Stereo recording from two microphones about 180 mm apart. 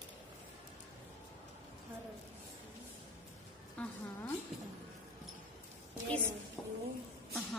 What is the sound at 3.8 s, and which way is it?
Speech, 5° left (ahead or behind).